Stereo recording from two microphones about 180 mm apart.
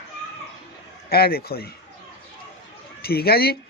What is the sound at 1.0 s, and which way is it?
Speech, 60° left (ahead or behind).